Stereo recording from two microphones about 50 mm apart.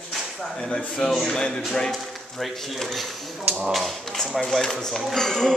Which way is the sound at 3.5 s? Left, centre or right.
Right.